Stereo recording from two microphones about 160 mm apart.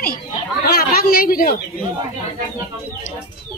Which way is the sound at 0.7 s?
75° left (ahead or behind).